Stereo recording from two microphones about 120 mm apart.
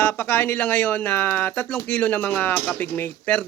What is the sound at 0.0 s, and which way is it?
Speech, 20° left (ahead or behind).